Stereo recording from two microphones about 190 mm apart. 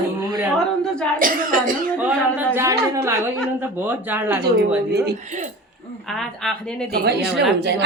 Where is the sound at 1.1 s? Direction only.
45° right (ahead or behind).